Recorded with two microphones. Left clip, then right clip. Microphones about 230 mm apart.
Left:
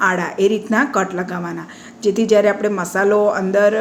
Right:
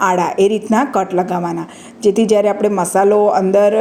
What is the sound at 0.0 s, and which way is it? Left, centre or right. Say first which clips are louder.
A woman's voice: right 3 dB; centre.